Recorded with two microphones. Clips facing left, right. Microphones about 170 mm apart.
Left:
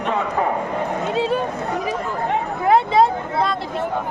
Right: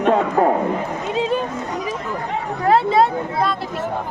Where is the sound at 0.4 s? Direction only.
45° right (ahead or behind).